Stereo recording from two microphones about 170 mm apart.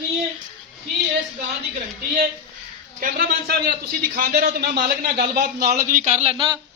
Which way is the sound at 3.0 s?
65° right (ahead or behind).